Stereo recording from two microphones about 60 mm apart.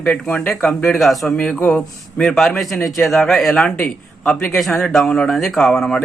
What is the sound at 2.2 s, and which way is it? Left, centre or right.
A man's voice, centre.